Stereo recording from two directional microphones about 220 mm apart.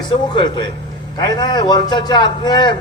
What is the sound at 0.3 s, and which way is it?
A man's voice, 20° left (ahead or behind).